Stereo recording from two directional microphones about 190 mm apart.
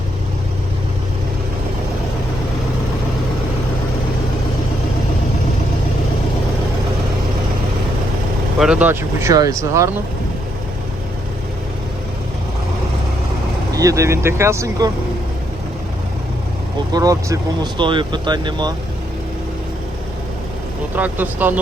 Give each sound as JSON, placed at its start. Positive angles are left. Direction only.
{"t": 8.5, "sound": "speech", "side_deg": -5}
{"t": 13.7, "sound": "speech", "side_deg": -15}
{"t": 16.9, "sound": "speech", "side_deg": -20}
{"t": 20.9, "sound": "speech", "side_deg": -10}